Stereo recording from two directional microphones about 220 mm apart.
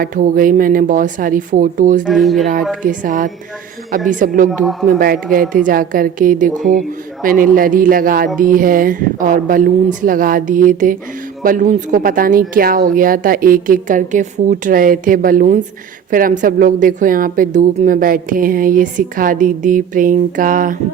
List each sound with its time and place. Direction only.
0.0 s a woman's voice: 40° right (ahead or behind)
2.0 s speech: centre (ahead or behind)
2.8 s a woman's voice: 35° right (ahead or behind)